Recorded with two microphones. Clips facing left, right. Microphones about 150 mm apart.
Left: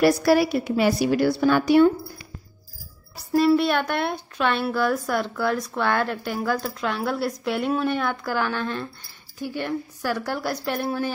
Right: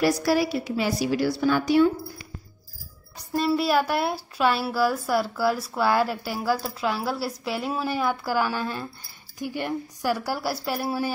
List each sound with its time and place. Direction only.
0.0 s a woman's voice: 60° left (ahead or behind)
3.2 s a woman's voice: centre (ahead or behind)